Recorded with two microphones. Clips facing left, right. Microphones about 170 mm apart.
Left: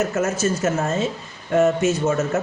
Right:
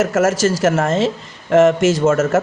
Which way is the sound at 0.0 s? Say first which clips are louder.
Right 6 dB; 90° right.